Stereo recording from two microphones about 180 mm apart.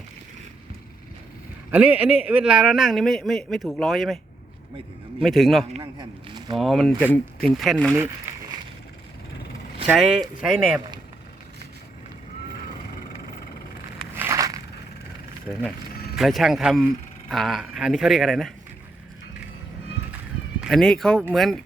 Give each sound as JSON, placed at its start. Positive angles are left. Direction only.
{"t": 1.7, "sound": "a man's voice", "side_deg": -10}
{"t": 5.2, "sound": "a man's voice", "side_deg": 0}
{"t": 5.7, "sound": "speech", "side_deg": -25}
{"t": 6.6, "sound": "a man's voice", "side_deg": 0}
{"t": 9.8, "sound": "a man's voice", "side_deg": 0}
{"t": 14.2, "sound": "crushing", "side_deg": -15}
{"t": 16.1, "sound": "a man's voice", "side_deg": 0}
{"t": 20.6, "sound": "a man's voice", "side_deg": 0}